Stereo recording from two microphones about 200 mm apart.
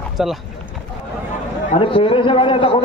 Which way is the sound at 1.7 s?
25° left (ahead or behind).